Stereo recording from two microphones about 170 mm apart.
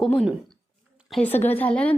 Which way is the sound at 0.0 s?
5° left (ahead or behind).